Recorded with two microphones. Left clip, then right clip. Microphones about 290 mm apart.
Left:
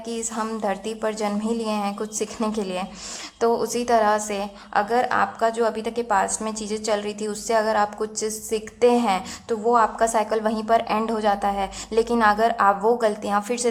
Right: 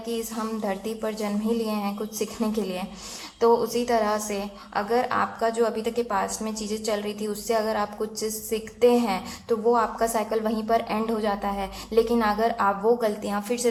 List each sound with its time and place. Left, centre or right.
0.3 s a woman's voice: left
3.6 s a woman's voice: centre
3.9 s a woman's voice: left